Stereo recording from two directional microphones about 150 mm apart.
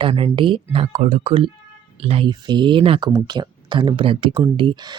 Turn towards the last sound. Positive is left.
turn(degrees=-30)  # may be behind; listen again after turning